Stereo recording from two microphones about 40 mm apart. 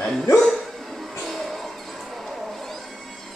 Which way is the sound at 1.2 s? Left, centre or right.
Centre.